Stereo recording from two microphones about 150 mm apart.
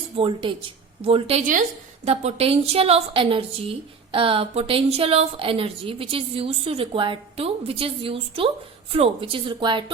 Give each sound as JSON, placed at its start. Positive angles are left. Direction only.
{"t": 0.2, "sound": "a woman's voice", "side_deg": -35}